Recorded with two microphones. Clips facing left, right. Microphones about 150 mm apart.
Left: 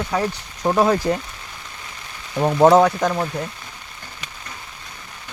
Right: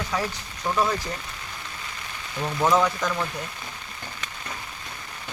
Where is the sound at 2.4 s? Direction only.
55° left (ahead or behind).